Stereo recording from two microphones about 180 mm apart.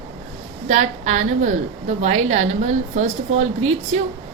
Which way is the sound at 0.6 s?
40° right (ahead or behind).